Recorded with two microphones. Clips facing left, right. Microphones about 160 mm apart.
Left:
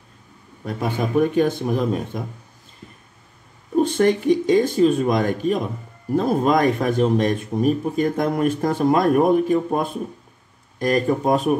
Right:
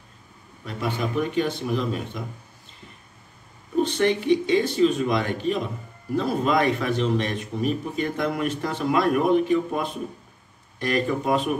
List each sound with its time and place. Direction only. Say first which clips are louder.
0.7 s speech: left 3 dB; 50° left (ahead or behind)
3.7 s speech: left 4 dB; 45° left (ahead or behind)